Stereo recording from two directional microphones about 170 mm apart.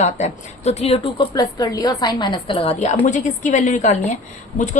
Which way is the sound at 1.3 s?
20° left (ahead or behind).